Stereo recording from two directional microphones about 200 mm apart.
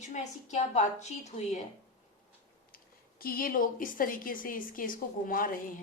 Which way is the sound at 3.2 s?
45° left (ahead or behind).